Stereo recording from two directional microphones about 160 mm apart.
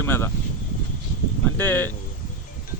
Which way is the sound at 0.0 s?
15° left (ahead or behind).